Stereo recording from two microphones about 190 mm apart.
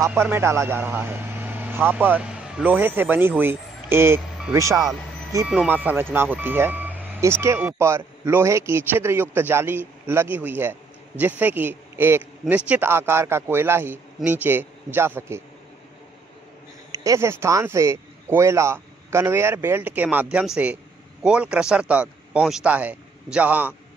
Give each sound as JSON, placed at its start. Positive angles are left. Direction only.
{"t": 0.0, "sound": "speech", "side_deg": -10}
{"t": 16.9, "sound": "a man's voice", "side_deg": -15}